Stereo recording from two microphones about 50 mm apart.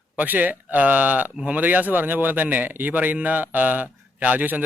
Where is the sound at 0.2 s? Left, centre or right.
Right.